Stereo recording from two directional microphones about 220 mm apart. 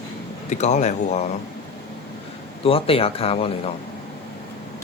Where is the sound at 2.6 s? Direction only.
25° left (ahead or behind).